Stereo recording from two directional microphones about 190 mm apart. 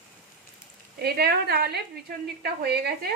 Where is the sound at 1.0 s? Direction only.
55° right (ahead or behind).